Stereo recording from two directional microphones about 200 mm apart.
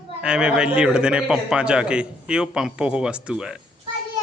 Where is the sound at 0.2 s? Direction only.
5° right (ahead or behind).